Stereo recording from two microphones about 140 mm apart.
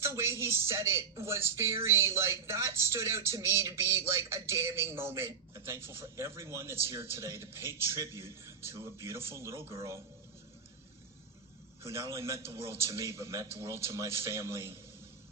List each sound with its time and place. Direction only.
0.0 s speech: 20° right (ahead or behind)
11.8 s speech: 20° right (ahead or behind)